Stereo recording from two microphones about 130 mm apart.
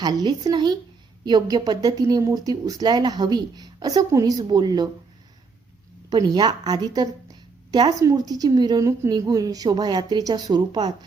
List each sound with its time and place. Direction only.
0.0 s a woman's voice: 30° right (ahead or behind)
6.1 s a woman's voice: 30° right (ahead or behind)